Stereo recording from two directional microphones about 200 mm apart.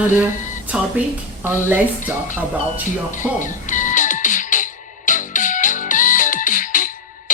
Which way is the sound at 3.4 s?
40° left (ahead or behind).